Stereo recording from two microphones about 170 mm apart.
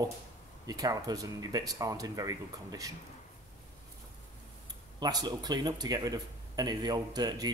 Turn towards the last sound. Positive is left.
turn(degrees=-25)  # may be behind; listen again after turning